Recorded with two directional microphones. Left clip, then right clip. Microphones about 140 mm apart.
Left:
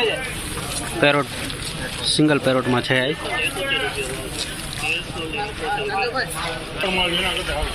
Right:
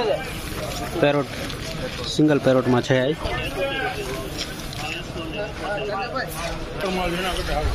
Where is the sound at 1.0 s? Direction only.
15° right (ahead or behind).